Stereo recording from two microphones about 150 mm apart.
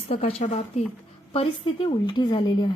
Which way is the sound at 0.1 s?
45° left (ahead or behind).